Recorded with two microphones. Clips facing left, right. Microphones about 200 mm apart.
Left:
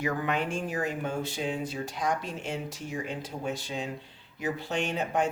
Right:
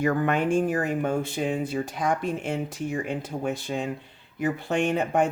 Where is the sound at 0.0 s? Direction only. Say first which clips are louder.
Right 6 dB; 50° right (ahead or behind).